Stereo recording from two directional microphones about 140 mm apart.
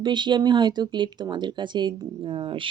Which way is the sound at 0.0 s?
35° right (ahead or behind).